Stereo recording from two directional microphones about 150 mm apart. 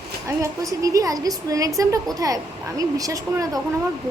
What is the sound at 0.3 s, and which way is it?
A woman's voice, 20° right (ahead or behind).